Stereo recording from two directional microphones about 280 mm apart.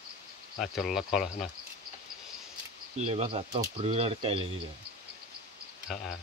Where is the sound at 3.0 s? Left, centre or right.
Right.